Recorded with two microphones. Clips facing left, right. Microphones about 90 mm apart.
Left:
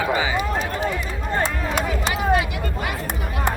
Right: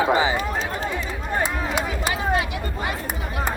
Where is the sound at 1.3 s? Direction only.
15° right (ahead or behind).